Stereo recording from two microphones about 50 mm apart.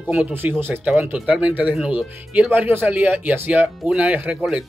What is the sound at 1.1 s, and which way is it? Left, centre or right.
Speech, right.